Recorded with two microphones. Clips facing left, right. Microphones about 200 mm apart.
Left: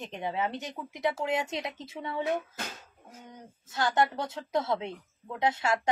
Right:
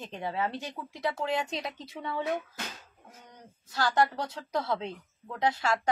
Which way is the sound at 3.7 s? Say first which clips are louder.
Even; 20° left (ahead or behind).